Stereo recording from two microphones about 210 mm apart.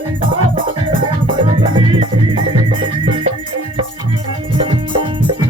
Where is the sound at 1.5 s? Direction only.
25° right (ahead or behind).